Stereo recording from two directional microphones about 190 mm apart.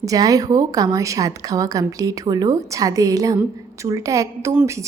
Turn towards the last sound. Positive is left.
turn(degrees=-15)  # may be behind; listen again after turning